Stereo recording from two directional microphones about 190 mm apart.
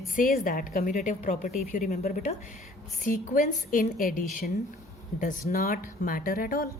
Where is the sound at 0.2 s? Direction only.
45° left (ahead or behind).